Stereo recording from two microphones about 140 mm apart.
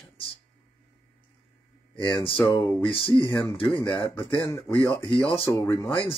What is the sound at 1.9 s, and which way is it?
Speech, 35° left (ahead or behind).